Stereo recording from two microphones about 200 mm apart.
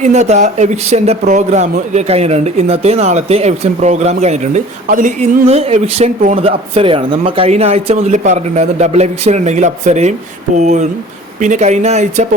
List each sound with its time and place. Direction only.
0.0 s speech: 35° right (ahead or behind)